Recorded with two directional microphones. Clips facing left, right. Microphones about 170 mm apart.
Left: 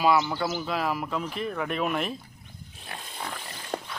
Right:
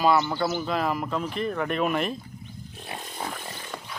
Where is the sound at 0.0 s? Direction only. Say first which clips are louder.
Right 1 dB; 5° left (ahead or behind).